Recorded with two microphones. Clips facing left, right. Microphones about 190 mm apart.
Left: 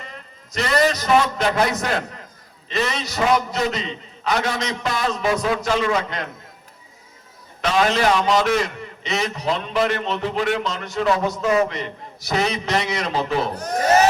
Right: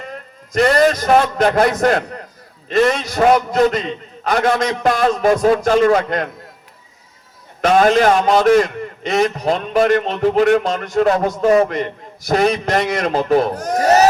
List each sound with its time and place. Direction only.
0.1 s a man's voice: 50° right (ahead or behind)
7.6 s a man's voice: 50° right (ahead or behind)